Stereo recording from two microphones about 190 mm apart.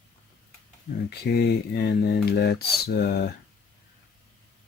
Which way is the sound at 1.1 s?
60° left (ahead or behind).